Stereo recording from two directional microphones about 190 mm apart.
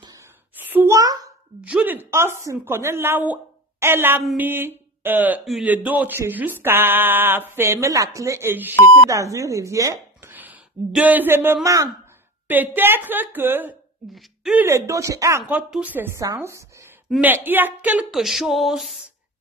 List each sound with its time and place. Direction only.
0.6 s a sound: 10° right (ahead or behind)
1.7 s speech: 10° right (ahead or behind)
4.2 s speech: centre (ahead or behind)
4.5 s a woman's voice: 10° right (ahead or behind)